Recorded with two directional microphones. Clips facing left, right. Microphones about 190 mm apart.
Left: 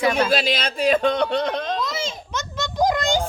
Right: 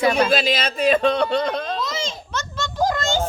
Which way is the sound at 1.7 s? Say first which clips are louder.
Even; centre (ahead or behind).